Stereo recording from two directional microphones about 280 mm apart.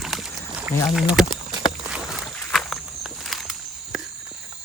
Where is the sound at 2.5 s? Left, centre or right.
Centre.